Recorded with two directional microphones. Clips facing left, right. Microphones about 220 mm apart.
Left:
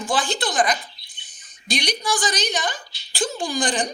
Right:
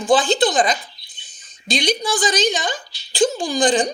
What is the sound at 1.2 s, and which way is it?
Bird, 90° right.